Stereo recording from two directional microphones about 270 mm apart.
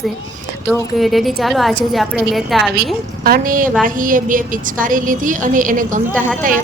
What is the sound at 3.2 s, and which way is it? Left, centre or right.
A woman's voice, right.